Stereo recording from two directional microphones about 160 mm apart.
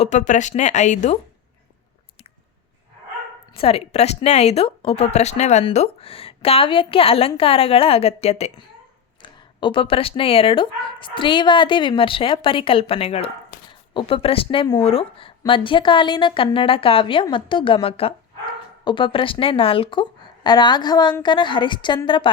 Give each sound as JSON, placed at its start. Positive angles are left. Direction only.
{"t": 0.0, "sound": "speech", "side_deg": 50}
{"t": 3.5, "sound": "a woman's voice", "side_deg": 35}